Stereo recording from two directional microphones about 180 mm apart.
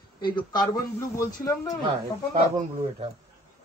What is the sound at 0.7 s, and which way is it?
Speech, 15° left (ahead or behind).